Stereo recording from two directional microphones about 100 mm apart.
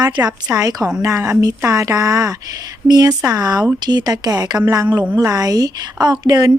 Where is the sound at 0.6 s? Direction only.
40° right (ahead or behind).